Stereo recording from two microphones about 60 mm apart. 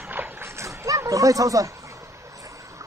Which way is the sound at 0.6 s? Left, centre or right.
Right.